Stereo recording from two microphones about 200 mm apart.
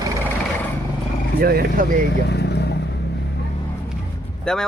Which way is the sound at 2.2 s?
55° left (ahead or behind).